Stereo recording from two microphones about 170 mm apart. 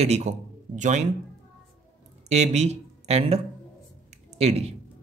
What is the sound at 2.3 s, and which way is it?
A man's voice, 40° right (ahead or behind).